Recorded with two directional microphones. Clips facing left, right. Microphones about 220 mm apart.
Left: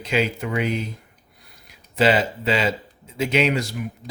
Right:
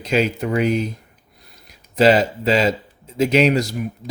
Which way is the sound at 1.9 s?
40° right (ahead or behind).